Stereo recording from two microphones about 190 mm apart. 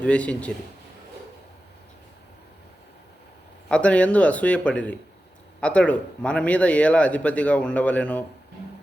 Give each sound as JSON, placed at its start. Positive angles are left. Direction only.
{"t": 0.0, "sound": "a man's voice", "side_deg": 5}
{"t": 3.7, "sound": "a man's voice", "side_deg": 5}